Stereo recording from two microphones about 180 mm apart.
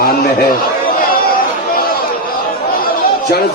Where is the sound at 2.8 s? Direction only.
55° left (ahead or behind).